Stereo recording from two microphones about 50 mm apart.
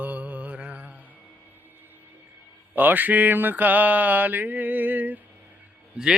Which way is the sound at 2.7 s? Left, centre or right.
Right.